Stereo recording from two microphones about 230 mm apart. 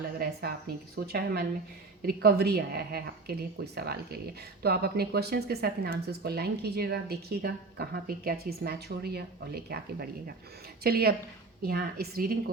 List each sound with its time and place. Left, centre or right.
0.9 s a woman's voice: right